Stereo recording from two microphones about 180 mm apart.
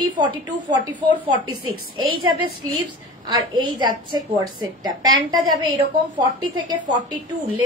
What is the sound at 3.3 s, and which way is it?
A woman's voice, 25° right (ahead or behind).